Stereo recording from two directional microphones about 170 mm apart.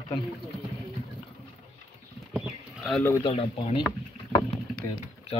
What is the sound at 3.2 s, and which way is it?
Speech, 35° left (ahead or behind).